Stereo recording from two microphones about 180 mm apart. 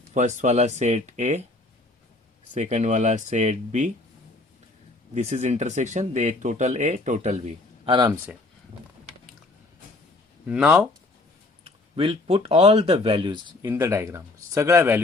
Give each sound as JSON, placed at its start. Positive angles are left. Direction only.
{"t": 0.1, "sound": "speech", "side_deg": -40}
{"t": 2.6, "sound": "speech", "side_deg": -40}
{"t": 5.1, "sound": "speech", "side_deg": -40}
{"t": 7.9, "sound": "speech", "side_deg": -25}
{"t": 10.4, "sound": "speech", "side_deg": -5}
{"t": 11.6, "sound": "speech", "side_deg": -30}
{"t": 13.7, "sound": "speech", "side_deg": -15}